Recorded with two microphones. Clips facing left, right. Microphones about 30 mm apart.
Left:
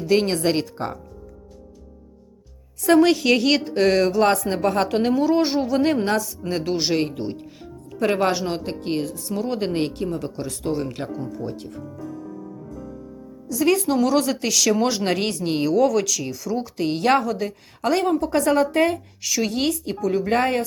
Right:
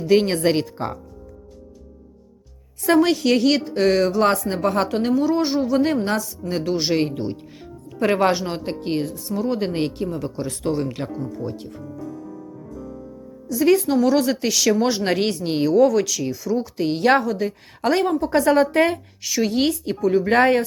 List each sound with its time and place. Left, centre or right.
0.1 s speech: centre
2.8 s a woman's voice: centre
9.3 s speech: centre
10.4 s speech: right
11.3 s speech: centre
13.6 s speech: centre
18.3 s speech: centre
18.6 s speech: right
19.2 s speech: centre
20.3 s speech: right